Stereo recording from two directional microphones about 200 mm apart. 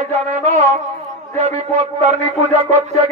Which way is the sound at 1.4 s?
35° right (ahead or behind).